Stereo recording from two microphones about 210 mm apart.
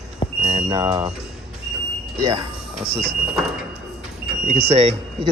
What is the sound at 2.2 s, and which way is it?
Speech, 15° right (ahead or behind).